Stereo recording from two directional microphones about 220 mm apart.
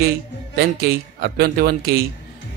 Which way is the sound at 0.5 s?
45° right (ahead or behind).